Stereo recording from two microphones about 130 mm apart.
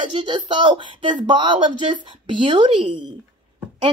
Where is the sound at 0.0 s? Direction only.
35° right (ahead or behind).